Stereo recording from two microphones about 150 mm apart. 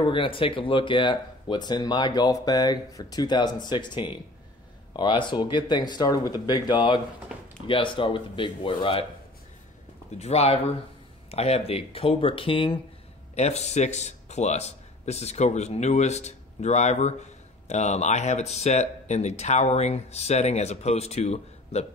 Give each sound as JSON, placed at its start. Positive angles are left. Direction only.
{"t": 0.0, "sound": "speech", "side_deg": 35}
{"t": 7.3, "sound": "speech", "side_deg": -5}
{"t": 7.6, "sound": "speech", "side_deg": 35}
{"t": 10.1, "sound": "speech", "side_deg": 45}
{"t": 13.3, "sound": "speech", "side_deg": 45}